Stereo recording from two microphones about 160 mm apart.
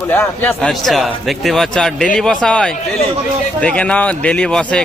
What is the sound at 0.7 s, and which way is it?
Speech, centre (ahead or behind).